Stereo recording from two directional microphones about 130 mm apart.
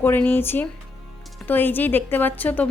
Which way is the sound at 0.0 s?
15° left (ahead or behind).